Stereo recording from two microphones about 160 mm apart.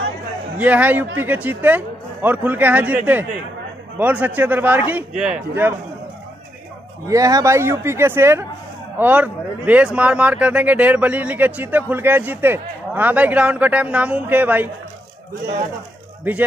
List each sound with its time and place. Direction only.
0.6 s speech: 10° right (ahead or behind)
7.1 s speech: 20° right (ahead or behind)
16.3 s speech: 10° right (ahead or behind)